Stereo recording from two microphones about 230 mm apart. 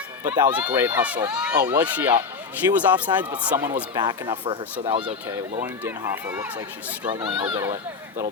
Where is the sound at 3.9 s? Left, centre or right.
Centre.